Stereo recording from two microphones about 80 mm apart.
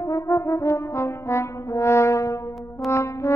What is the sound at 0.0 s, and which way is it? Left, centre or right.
Brass instrument, left.